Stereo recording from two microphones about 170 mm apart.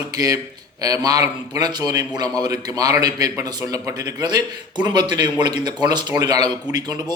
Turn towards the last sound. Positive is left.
turn(degrees=-25)  # may be behind; listen again after turning